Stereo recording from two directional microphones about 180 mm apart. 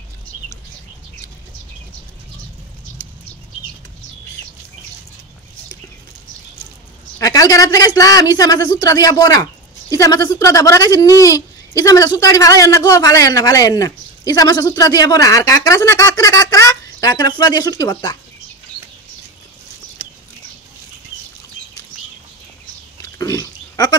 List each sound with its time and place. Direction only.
7.2 s a man's voice: 20° left (ahead or behind)
23.1 s pig: 20° left (ahead or behind)